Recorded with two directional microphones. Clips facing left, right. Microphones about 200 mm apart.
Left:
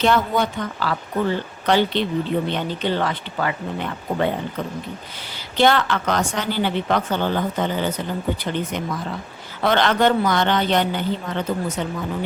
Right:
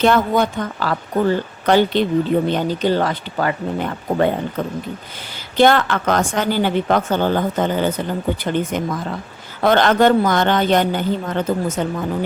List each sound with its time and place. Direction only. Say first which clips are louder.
0.0 s speech: right 4 dB; 50° right (ahead or behind)
5.5 s speech: right 4 dB; 50° right (ahead or behind)